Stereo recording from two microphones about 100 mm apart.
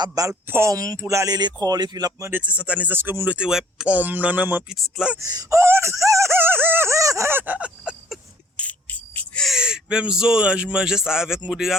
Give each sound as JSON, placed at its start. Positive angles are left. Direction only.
{"t": 0.0, "sound": "speech", "side_deg": -35}
{"t": 0.4, "sound": "a sound", "side_deg": -20}
{"t": 0.7, "sound": "speech", "side_deg": -35}
{"t": 2.3, "sound": "speech", "side_deg": -15}
{"t": 3.9, "sound": "speech", "side_deg": -15}
{"t": 4.7, "sound": "speech", "side_deg": -5}
{"t": 5.2, "sound": "a sound", "side_deg": -35}
{"t": 8.5, "sound": "a sound", "side_deg": 15}
{"t": 9.4, "sound": "speech", "side_deg": -5}